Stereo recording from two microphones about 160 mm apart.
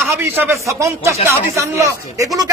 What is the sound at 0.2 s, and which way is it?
A man's voice, 10° right (ahead or behind).